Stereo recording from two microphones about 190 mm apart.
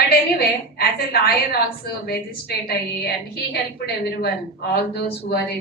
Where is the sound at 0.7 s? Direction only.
55° left (ahead or behind).